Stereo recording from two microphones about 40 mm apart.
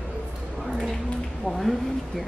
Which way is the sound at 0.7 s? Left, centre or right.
Centre.